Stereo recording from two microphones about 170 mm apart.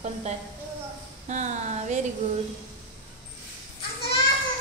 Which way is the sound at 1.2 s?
45° right (ahead or behind).